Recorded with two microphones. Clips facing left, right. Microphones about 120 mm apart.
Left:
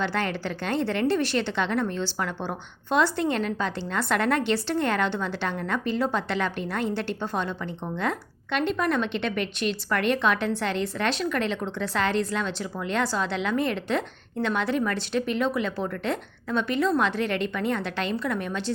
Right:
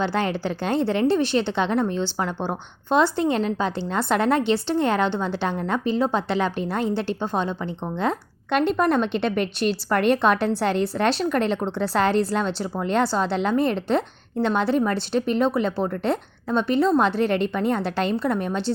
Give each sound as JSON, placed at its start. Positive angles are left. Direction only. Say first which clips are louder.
{"t": 0.0, "sound": "a woman's voice", "louder": "right 4 dB", "side_deg": -30}
{"t": 8.4, "sound": "speech", "louder": "right 5 dB", "side_deg": -40}